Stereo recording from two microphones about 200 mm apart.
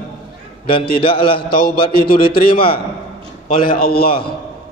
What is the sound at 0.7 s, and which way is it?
Speech, 50° left (ahead or behind).